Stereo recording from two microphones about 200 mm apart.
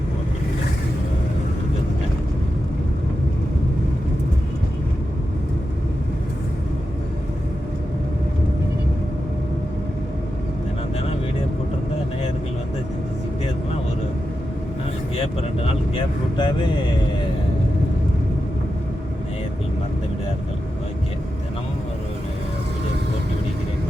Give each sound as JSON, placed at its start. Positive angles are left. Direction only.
{"t": 16.4, "sound": "vehicle", "side_deg": 20}